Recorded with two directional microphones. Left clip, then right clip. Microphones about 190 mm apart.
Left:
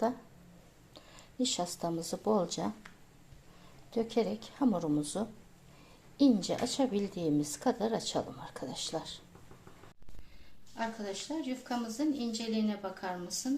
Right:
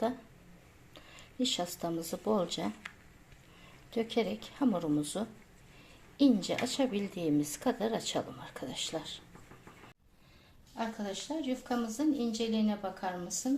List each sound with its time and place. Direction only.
0.9 s speech: centre (ahead or behind)
3.9 s speech: centre (ahead or behind)
10.8 s speech: 50° right (ahead or behind)